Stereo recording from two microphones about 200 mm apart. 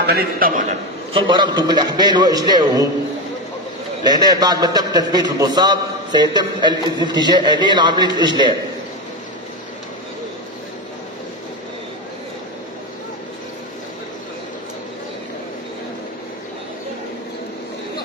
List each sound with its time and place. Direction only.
0.0 s a man's voice: 55° right (ahead or behind)
0.6 s a man's voice: 35° right (ahead or behind)
1.2 s a man's voice: 20° right (ahead or behind)
4.0 s a man's voice: 20° right (ahead or behind)